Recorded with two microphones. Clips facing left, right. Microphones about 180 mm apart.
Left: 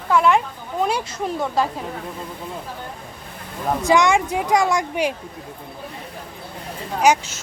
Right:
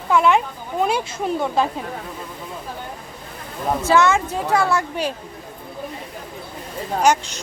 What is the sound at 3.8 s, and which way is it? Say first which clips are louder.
A woman's voice: even; 15° left (ahead or behind).